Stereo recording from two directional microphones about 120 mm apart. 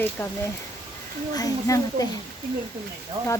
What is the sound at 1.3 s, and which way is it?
Speech, 30° left (ahead or behind).